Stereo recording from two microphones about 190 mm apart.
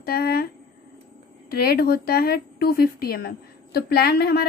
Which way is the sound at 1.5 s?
55° left (ahead or behind).